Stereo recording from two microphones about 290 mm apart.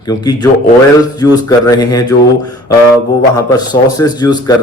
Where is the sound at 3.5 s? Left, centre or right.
Centre.